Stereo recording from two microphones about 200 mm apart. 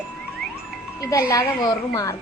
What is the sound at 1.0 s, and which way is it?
A woman's voice, 15° left (ahead or behind).